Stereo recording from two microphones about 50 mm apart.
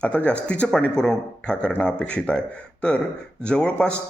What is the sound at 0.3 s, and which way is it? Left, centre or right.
A man's voice, left.